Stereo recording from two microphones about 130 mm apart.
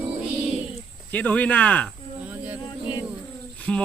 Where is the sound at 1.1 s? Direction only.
10° left (ahead or behind).